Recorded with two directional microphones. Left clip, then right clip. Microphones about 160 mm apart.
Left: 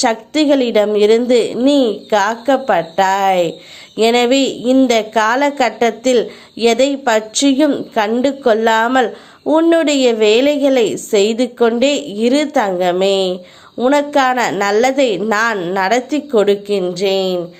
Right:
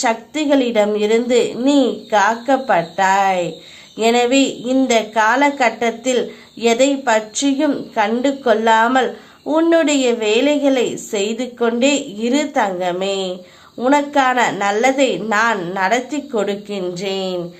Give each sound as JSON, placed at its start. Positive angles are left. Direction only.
{"t": 0.0, "sound": "a woman's voice", "side_deg": 30}